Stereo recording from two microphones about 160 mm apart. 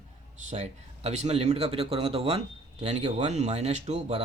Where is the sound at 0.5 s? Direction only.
45° right (ahead or behind).